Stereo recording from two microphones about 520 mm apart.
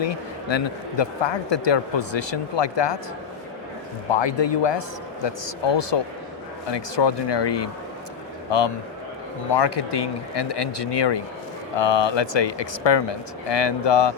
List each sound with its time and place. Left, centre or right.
0.0 s a man's voice: left
4.1 s a man's voice: left